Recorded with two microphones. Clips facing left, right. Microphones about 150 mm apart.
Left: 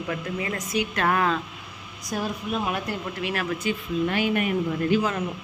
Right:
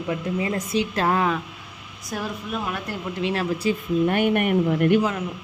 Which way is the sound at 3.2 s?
25° right (ahead or behind).